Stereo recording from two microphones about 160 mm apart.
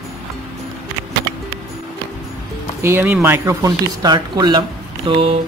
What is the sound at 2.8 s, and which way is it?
Speech, 10° right (ahead or behind).